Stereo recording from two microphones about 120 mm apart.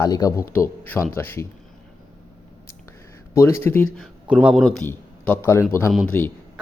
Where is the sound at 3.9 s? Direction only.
5° right (ahead or behind).